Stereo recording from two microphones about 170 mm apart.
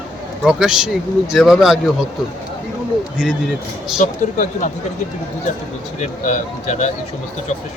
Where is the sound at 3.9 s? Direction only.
50° left (ahead or behind).